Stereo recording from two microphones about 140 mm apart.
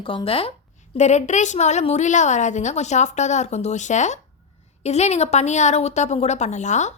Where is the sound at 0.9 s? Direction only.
55° left (ahead or behind).